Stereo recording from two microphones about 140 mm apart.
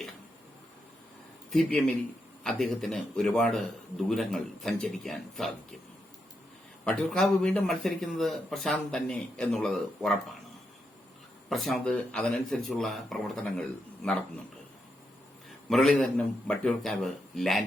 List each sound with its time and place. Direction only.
1.5 s a man's voice: centre (ahead or behind)
6.8 s speech: 5° left (ahead or behind)
11.4 s speech: centre (ahead or behind)
15.7 s speech: 5° left (ahead or behind)